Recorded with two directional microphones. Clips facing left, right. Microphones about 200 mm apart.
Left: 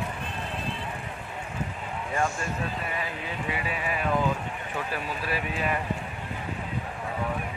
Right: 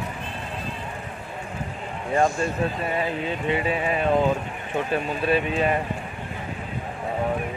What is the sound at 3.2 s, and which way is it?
Speech, 25° right (ahead or behind).